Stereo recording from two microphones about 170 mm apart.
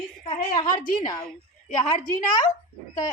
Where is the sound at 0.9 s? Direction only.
25° left (ahead or behind).